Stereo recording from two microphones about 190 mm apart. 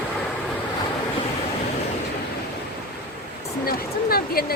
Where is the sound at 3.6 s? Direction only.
50° left (ahead or behind).